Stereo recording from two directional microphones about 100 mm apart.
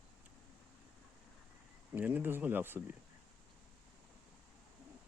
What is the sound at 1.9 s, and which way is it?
Speech, 20° right (ahead or behind).